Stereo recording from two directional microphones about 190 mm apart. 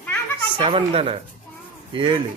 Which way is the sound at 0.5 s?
25° right (ahead or behind).